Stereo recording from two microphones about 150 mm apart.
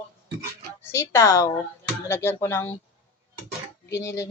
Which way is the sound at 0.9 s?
20° left (ahead or behind).